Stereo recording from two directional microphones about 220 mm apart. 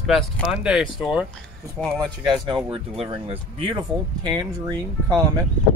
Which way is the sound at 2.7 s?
25° right (ahead or behind).